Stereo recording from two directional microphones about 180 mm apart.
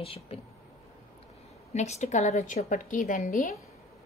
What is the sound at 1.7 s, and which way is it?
A woman's voice, 40° left (ahead or behind).